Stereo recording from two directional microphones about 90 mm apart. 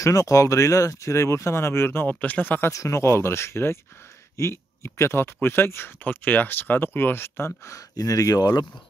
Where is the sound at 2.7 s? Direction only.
35° left (ahead or behind).